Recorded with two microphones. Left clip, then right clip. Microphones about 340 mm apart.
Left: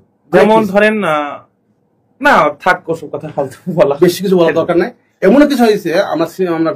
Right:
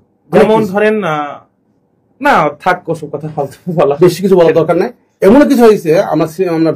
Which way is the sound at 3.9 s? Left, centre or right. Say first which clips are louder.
Right 3 dB; right.